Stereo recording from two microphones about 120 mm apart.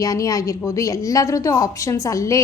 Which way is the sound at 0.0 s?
30° left (ahead or behind).